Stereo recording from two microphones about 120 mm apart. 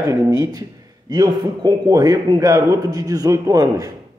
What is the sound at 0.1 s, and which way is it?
A man's voice, 30° right (ahead or behind).